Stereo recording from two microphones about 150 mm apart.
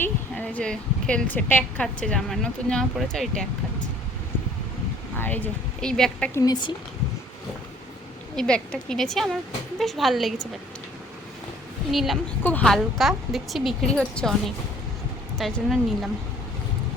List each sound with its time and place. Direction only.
0.0 s a woman's voice: 10° left (ahead or behind)
5.1 s a woman's voice: 10° left (ahead or behind)
6.4 s speech: 30° left (ahead or behind)
8.4 s a woman's voice: 5° left (ahead or behind)
11.9 s a woman's voice: centre (ahead or behind)
12.4 s a woman's voice: 10° left (ahead or behind)